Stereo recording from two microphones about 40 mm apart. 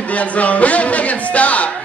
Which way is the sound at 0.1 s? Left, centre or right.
Left.